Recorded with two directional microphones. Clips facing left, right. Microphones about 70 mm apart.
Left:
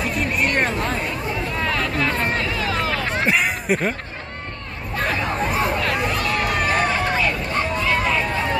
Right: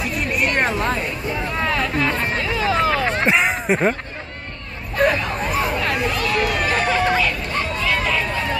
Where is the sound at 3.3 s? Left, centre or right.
Right.